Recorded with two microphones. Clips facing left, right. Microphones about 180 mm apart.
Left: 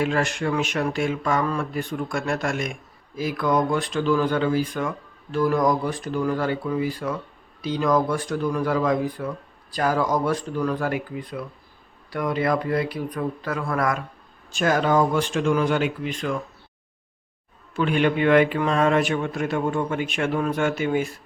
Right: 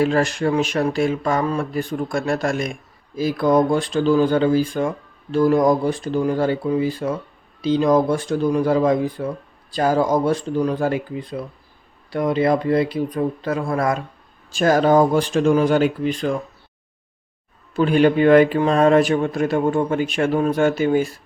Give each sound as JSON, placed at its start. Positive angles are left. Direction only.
{"t": 0.0, "sound": "speech", "side_deg": -35}
{"t": 17.7, "sound": "speech", "side_deg": -35}